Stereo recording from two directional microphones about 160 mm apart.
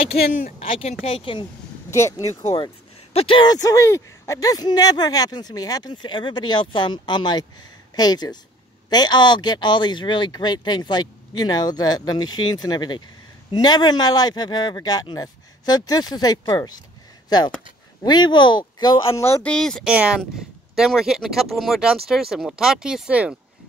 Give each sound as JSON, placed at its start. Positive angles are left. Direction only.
{"t": 0.1, "sound": "speech", "side_deg": 75}
{"t": 0.6, "sound": "speech", "side_deg": 40}
{"t": 1.9, "sound": "speech", "side_deg": 15}
{"t": 2.5, "sound": "speech", "side_deg": 35}
{"t": 18.0, "sound": "speech", "side_deg": 25}
{"t": 19.5, "sound": "speech", "side_deg": 5}
{"t": 19.9, "sound": "speech", "side_deg": -5}